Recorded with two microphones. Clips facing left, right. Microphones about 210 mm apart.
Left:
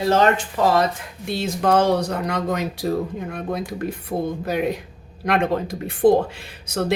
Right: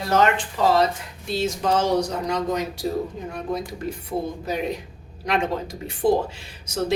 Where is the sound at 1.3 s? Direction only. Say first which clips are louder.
Left 3 dB; 60° left (ahead or behind).